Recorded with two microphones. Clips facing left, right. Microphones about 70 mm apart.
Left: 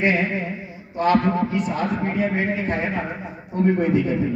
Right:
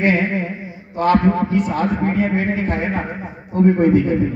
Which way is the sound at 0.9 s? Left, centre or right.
Right.